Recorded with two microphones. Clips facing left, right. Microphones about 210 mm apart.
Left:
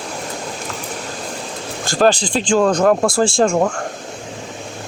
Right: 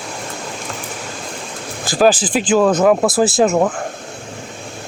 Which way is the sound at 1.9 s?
5° right (ahead or behind).